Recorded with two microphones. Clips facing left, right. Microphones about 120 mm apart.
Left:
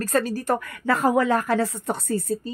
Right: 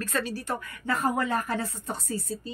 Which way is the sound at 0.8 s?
90° left.